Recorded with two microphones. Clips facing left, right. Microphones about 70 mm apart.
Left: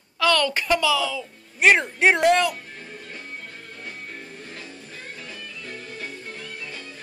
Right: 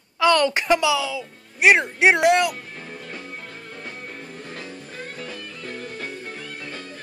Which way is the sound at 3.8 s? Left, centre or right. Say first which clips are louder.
Right 1 dB; right.